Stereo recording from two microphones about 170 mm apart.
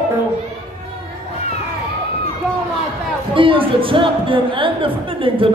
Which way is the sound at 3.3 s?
30° right (ahead or behind).